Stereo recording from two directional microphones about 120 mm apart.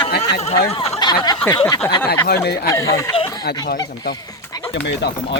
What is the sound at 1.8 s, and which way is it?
Speech, 20° left (ahead or behind).